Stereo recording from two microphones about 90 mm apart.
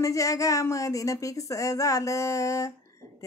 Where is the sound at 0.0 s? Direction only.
35° left (ahead or behind).